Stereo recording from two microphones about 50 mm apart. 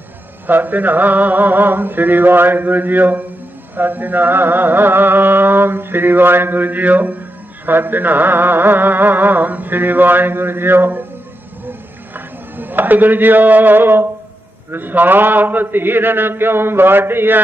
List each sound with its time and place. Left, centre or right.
0.5 s mantra: right
3.7 s music: right
11.6 s a sound: right
14.7 s music: right